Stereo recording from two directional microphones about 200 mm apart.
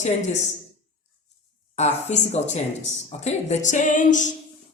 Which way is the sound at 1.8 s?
35° left (ahead or behind).